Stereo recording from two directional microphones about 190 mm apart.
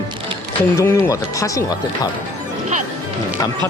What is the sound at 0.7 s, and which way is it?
Speech, 10° left (ahead or behind).